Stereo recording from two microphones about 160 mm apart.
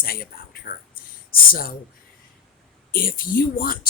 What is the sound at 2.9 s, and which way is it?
Speech, 65° left (ahead or behind).